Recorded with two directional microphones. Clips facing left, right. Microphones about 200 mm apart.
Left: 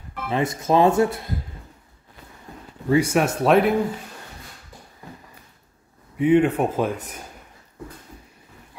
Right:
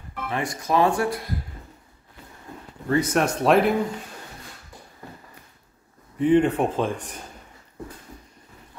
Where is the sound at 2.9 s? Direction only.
10° left (ahead or behind).